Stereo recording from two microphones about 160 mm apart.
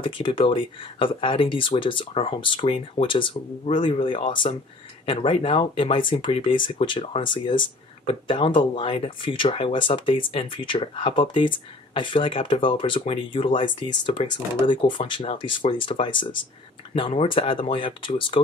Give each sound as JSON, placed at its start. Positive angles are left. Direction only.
{"t": 0.0, "sound": "speech", "side_deg": 30}